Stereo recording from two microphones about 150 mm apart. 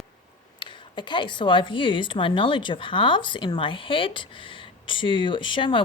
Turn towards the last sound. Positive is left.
turn(degrees=35)  # may be behind; listen again after turning